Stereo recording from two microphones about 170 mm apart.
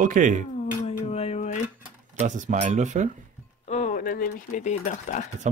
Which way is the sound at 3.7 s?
45° left (ahead or behind).